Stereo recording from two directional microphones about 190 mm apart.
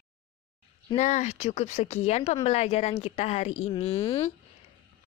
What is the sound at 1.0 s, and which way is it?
Speech, 40° left (ahead or behind).